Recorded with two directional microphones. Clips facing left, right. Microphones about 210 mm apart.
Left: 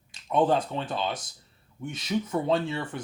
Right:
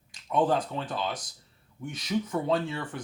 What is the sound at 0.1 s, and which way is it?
Speech, 25° left (ahead or behind).